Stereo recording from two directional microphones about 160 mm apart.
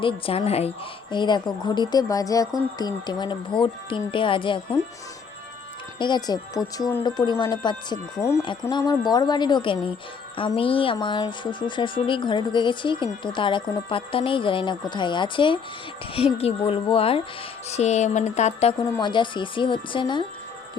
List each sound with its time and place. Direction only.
0.0 s speech: 35° left (ahead or behind)
1.1 s speech: 30° left (ahead or behind)
6.0 s speech: 25° left (ahead or behind)
17.7 s music: 45° left (ahead or behind)
18.8 s speech: 30° left (ahead or behind)